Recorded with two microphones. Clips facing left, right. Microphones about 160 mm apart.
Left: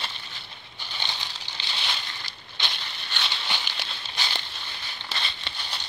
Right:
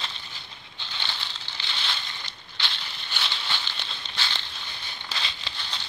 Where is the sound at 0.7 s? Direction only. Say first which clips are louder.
Left 1 dB; 15° left (ahead or behind).